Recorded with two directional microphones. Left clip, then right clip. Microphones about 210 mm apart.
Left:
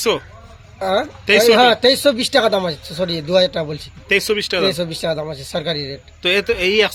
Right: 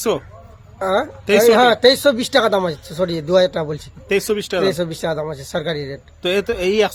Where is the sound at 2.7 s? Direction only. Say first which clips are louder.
Left 2 dB; 40° right (ahead or behind).